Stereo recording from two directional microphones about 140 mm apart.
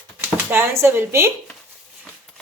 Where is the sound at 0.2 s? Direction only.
15° right (ahead or behind).